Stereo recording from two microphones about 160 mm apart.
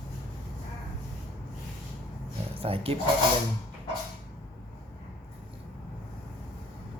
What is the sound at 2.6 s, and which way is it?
Speech, 35° right (ahead or behind).